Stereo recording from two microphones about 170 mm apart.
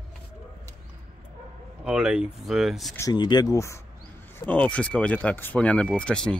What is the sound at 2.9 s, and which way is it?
Speech, 25° left (ahead or behind).